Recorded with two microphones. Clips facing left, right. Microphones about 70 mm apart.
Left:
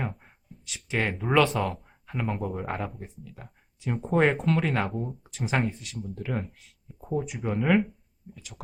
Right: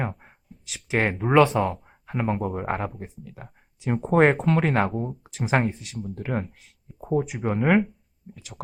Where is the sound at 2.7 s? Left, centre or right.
Right.